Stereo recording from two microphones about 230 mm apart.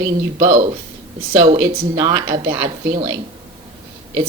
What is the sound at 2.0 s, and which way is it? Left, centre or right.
A woman's voice, centre.